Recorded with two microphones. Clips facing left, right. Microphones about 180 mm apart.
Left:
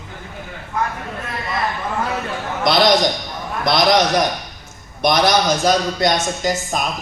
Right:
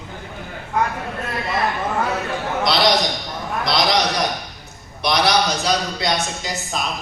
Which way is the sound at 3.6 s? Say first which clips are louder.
Left 4 dB; 50° left (ahead or behind).